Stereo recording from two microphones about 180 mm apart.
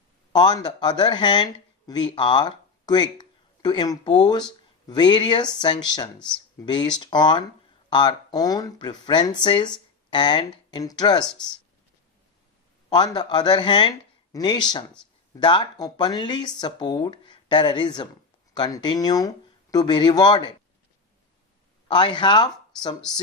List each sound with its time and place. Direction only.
0.3 s speech: 25° left (ahead or behind)
12.9 s speech: 25° left (ahead or behind)
21.8 s speech: 25° left (ahead or behind)